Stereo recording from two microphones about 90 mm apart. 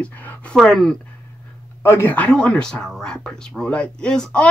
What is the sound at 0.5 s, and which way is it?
Speech, 5° left (ahead or behind).